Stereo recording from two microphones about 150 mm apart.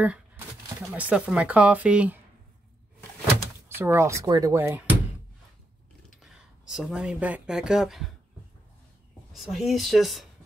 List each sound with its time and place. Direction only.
0.9 s speech: 10° right (ahead or behind)
3.6 s speech: 15° right (ahead or behind)
6.2 s speech: 5° right (ahead or behind)
9.3 s a woman's voice: centre (ahead or behind)